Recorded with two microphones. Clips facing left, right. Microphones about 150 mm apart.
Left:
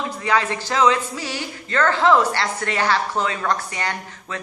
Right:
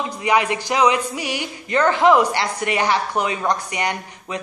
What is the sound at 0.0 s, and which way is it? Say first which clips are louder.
Speech: right 2 dB; 15° right (ahead or behind).